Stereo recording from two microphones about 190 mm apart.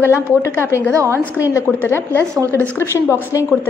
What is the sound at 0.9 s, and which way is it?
Speech, 15° right (ahead or behind).